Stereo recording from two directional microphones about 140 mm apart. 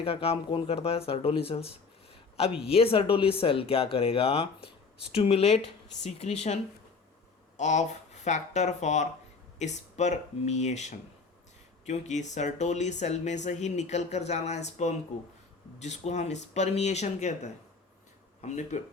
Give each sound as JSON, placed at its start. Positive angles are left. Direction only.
{"t": 0.0, "sound": "speech", "side_deg": 45}